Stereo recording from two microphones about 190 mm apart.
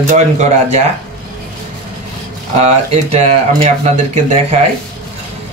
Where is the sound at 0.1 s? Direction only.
35° right (ahead or behind).